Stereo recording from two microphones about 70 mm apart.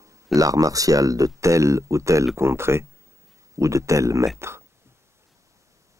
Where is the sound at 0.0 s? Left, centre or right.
Right.